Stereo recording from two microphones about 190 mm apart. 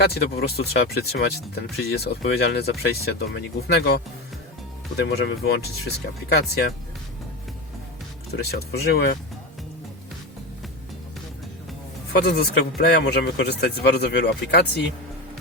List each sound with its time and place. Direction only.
0.0 s speech: 55° left (ahead or behind)
8.4 s speech: 55° left (ahead or behind)
12.1 s speech: 55° left (ahead or behind)